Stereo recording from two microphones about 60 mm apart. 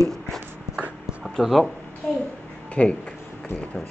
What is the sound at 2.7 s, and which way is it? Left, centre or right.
Speech, centre.